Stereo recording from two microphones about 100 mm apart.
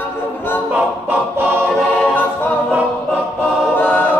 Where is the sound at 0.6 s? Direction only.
15° right (ahead or behind).